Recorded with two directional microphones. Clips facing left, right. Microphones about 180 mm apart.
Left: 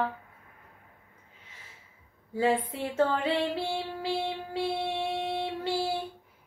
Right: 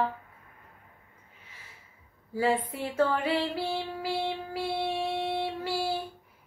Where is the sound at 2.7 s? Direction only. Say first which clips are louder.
Even; 25° left (ahead or behind).